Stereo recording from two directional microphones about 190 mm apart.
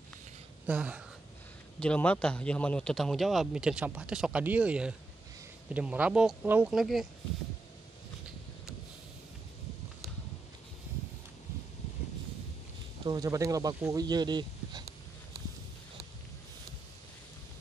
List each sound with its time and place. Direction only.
0.7 s speech: 5° right (ahead or behind)
1.8 s a man's voice: 5° left (ahead or behind)
13.0 s speech: 20° right (ahead or behind)